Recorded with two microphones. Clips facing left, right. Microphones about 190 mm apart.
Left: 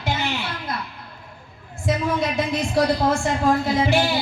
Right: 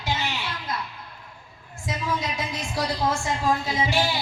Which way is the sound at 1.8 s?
55° left (ahead or behind).